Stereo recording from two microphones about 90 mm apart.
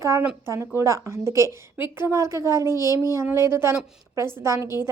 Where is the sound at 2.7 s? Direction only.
45° left (ahead or behind).